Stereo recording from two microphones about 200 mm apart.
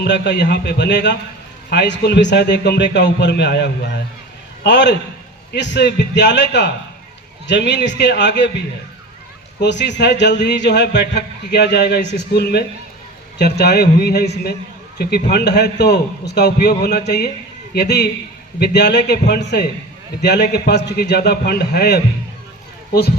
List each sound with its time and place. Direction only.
0.0 s speech: 60° left (ahead or behind)
9.6 s speech: 60° left (ahead or behind)